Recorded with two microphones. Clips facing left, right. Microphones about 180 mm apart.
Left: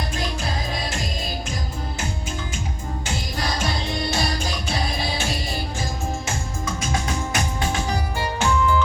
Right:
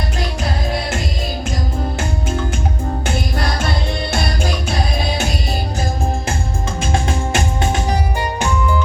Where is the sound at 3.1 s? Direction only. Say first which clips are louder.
Right 4 dB; 60° right (ahead or behind).